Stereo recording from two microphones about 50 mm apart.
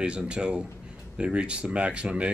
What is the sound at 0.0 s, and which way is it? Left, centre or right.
Speech, centre.